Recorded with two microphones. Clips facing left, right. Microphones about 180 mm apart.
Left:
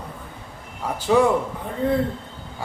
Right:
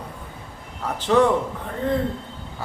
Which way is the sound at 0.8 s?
10° left (ahead or behind).